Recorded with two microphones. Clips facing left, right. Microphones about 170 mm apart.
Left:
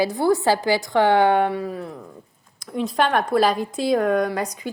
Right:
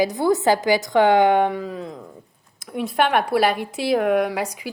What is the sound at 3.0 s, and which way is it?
Speech, 10° right (ahead or behind).